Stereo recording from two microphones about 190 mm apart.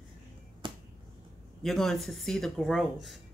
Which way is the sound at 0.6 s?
25° right (ahead or behind).